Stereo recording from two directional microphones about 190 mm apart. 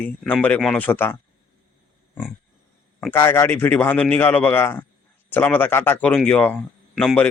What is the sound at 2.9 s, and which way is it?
Speech, 10° left (ahead or behind).